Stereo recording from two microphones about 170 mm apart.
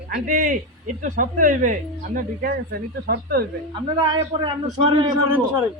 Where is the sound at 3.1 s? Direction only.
65° right (ahead or behind).